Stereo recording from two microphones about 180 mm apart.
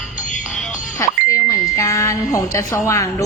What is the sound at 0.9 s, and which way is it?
Speech, 20° left (ahead or behind).